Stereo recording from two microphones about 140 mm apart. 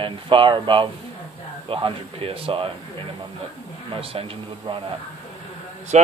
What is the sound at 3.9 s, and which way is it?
Speech, 40° right (ahead or behind).